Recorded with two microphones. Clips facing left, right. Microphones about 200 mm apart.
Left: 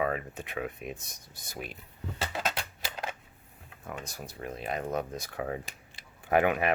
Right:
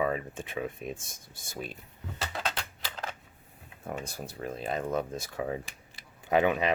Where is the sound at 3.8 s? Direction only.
30° right (ahead or behind).